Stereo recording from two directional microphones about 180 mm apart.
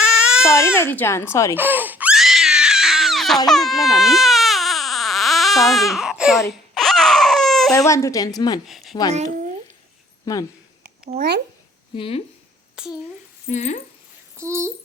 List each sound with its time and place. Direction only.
0.0 s baby cry: 5° right (ahead or behind)
0.4 s speech: 15° left (ahead or behind)
1.5 s crying: 10° right (ahead or behind)
3.5 s baby cry: centre (ahead or behind)
7.8 s speech: 15° left (ahead or behind)
8.6 s speech: centre (ahead or behind)
10.3 s speech: 15° left (ahead or behind)
11.2 s speech: 60° right (ahead or behind)
11.9 s speech: 30° left (ahead or behind)
12.8 s speech: 5° right (ahead or behind)
13.5 s speech: 40° left (ahead or behind)
14.3 s a child's voice: 15° right (ahead or behind)